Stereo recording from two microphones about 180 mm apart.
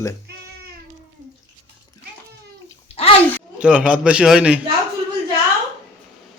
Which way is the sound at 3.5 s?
5° right (ahead or behind).